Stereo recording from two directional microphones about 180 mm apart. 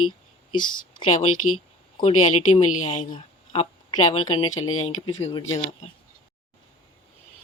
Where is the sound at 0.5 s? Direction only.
25° left (ahead or behind).